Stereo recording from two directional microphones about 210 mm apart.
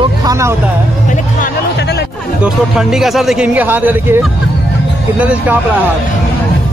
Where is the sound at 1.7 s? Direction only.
50° left (ahead or behind).